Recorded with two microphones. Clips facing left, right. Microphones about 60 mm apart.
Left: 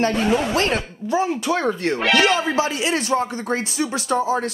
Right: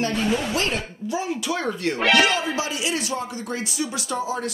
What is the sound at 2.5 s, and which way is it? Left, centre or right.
Speech, left.